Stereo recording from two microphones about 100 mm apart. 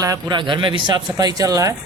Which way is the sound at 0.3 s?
50° right (ahead or behind).